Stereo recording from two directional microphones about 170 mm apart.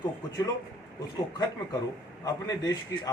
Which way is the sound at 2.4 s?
20° left (ahead or behind).